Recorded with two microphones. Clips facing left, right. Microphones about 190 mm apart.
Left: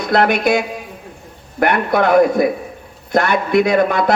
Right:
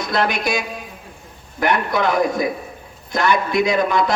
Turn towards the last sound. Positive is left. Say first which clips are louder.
# left 4 dB
turn(degrees=60)  # may be behind; listen again after turning